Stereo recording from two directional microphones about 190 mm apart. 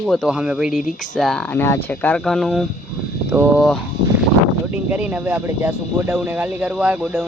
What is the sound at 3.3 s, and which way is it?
Speech, 10° right (ahead or behind).